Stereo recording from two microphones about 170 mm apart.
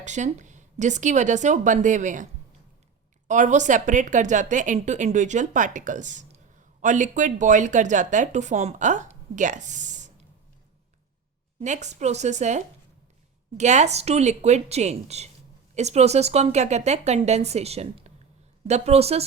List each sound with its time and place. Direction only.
0.0 s speech: 45° right (ahead or behind)
11.6 s speech: 45° right (ahead or behind)